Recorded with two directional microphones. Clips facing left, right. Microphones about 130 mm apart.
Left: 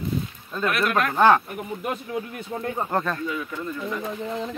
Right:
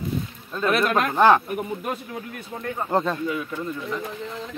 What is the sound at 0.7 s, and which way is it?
Speech, 25° right (ahead or behind).